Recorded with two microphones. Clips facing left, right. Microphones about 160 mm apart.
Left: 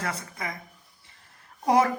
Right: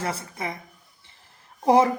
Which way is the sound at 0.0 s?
30° right (ahead or behind).